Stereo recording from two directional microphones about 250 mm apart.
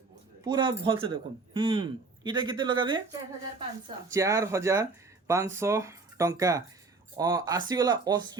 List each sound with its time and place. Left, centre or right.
0.4 s a man's voice: centre